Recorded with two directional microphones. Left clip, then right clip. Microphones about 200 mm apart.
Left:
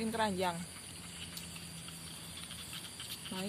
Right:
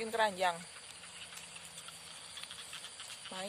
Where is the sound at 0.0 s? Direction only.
50° right (ahead or behind).